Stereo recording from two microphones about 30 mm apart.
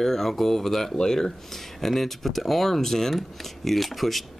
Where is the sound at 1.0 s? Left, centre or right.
Left.